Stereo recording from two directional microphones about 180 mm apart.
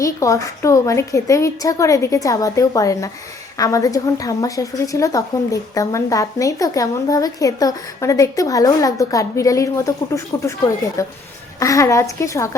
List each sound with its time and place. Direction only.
0.0 s a woman's voice: 20° left (ahead or behind)